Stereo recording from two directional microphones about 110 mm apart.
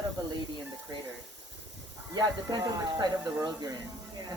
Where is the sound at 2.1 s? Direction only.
35° right (ahead or behind).